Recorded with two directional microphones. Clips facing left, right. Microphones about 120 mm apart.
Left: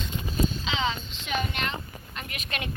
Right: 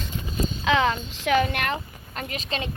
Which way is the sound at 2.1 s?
35° right (ahead or behind).